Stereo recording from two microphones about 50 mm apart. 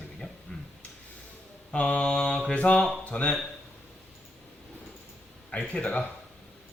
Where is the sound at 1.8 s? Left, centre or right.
Left.